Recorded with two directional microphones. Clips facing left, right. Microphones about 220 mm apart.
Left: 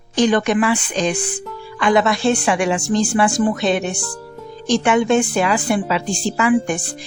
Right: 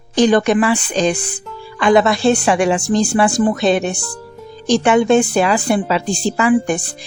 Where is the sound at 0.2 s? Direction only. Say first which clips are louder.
Right 3 dB; 35° right (ahead or behind).